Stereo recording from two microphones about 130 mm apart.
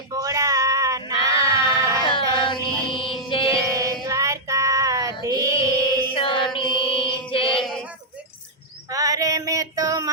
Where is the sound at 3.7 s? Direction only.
25° right (ahead or behind).